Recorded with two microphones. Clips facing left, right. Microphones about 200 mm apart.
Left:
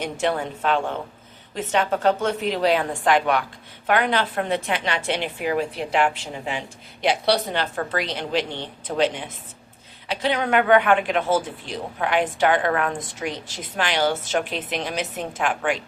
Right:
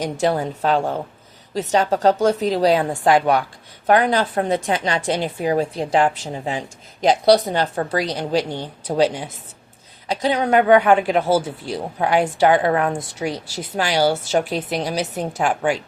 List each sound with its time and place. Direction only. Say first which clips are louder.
0.0 s a woman's voice: right 4 dB; 40° right (ahead or behind)